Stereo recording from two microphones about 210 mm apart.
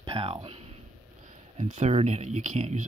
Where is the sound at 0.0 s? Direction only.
25° right (ahead or behind).